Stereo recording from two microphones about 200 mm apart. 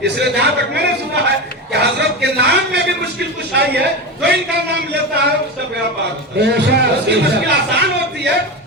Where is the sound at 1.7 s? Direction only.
55° right (ahead or behind).